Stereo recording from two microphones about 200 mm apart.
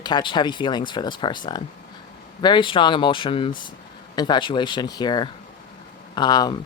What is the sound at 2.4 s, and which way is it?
Speech, 25° left (ahead or behind).